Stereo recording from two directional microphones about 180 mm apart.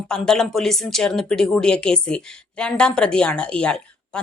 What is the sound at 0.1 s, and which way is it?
Speech, 5° left (ahead or behind).